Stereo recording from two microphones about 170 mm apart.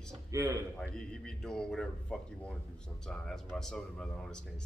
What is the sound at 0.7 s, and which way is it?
Speech, 5° left (ahead or behind).